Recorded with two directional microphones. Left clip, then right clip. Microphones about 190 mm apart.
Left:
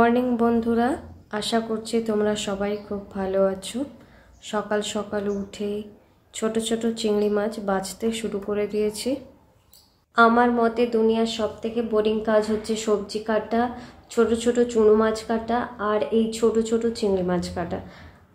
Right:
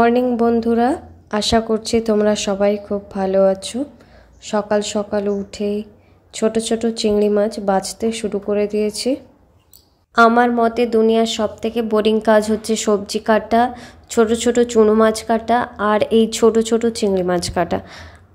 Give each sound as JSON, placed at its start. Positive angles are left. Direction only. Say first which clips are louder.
{"t": 0.0, "sound": "speech", "louder": "right 5 dB", "side_deg": -30}
{"t": 10.1, "sound": "speech", "louder": "right 5 dB", "side_deg": -35}